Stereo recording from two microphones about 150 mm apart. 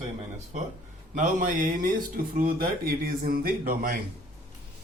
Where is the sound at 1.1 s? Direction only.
55° right (ahead or behind).